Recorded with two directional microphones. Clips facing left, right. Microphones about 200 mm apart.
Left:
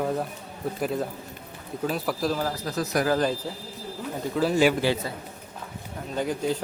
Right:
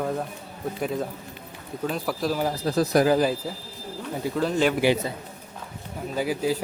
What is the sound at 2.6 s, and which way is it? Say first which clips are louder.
Speech: right 6 dB; 30° right (ahead or behind).